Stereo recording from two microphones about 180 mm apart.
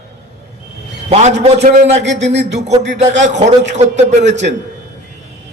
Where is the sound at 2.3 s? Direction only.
75° right (ahead or behind).